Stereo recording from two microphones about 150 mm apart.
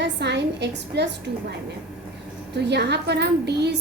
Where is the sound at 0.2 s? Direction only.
90° right.